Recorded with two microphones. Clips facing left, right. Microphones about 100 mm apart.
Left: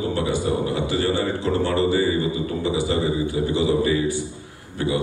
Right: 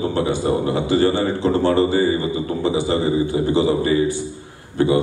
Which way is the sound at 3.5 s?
30° right (ahead or behind).